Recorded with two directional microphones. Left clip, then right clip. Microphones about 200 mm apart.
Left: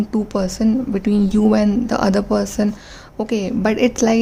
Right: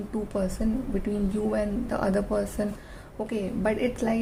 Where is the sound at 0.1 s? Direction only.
45° left (ahead or behind).